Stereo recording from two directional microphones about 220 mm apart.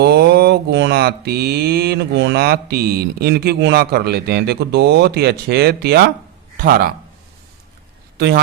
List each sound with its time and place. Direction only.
0.0 s mantra: 45° right (ahead or behind)
6.6 s a man's voice: 40° right (ahead or behind)